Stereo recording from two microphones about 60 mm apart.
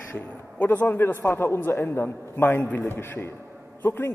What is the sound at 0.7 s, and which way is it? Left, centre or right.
A man's voice, left.